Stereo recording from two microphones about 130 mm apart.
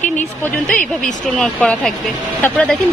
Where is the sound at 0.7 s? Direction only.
5° left (ahead or behind).